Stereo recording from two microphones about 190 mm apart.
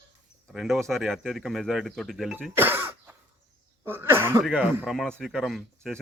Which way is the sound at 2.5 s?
10° right (ahead or behind).